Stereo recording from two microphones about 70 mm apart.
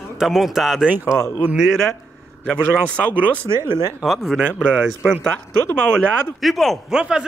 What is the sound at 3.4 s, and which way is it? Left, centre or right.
Speech, right.